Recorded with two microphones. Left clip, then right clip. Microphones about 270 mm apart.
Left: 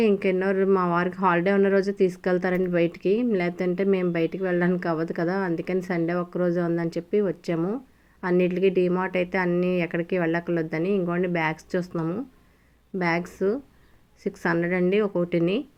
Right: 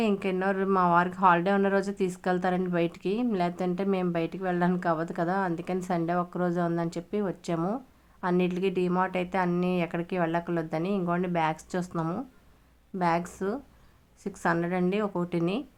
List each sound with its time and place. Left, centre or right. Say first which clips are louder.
0.0 s speech: left 5 dB; centre